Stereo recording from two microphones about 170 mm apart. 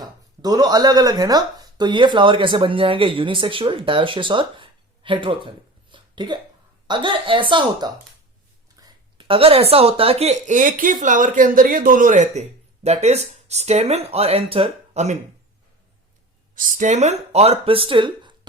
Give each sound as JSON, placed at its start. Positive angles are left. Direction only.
{"t": 0.0, "sound": "a woman's voice", "side_deg": -20}
{"t": 16.6, "sound": "speech", "side_deg": -50}